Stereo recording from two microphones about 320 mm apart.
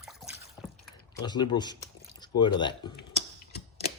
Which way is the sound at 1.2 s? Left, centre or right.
Centre.